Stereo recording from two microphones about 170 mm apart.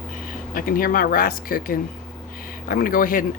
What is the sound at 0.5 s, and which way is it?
Speech, 55° left (ahead or behind).